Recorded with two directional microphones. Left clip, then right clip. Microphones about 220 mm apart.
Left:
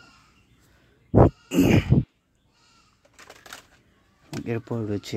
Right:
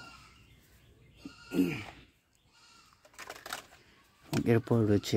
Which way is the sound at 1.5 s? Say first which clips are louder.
Left 11 dB; 40° left (ahead or behind).